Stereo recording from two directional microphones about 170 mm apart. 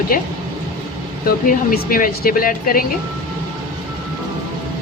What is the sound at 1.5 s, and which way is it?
Speech, 55° left (ahead or behind).